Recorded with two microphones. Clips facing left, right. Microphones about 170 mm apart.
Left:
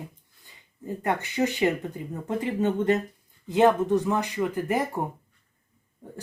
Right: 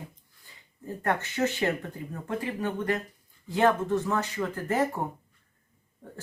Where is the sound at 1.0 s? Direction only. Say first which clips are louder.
Left 1 dB; 15° left (ahead or behind).